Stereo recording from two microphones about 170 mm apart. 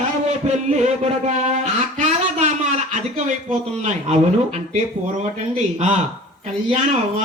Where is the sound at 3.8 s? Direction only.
40° right (ahead or behind).